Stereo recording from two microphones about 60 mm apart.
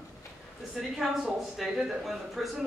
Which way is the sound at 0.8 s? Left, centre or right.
Centre.